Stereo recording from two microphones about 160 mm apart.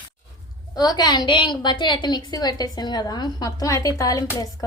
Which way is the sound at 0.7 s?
25° left (ahead or behind).